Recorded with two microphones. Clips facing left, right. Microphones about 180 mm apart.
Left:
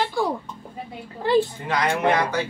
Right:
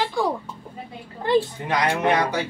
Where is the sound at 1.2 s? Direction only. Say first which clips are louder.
Even; 20° right (ahead or behind).